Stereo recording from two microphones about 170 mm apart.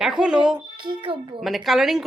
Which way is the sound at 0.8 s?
30° right (ahead or behind).